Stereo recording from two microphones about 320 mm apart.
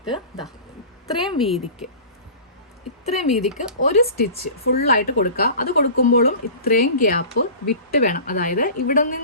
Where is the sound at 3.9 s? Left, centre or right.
Left.